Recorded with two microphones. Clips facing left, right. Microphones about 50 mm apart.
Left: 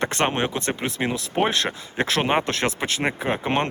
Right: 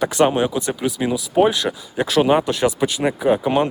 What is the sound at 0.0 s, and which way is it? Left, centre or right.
Speech, left.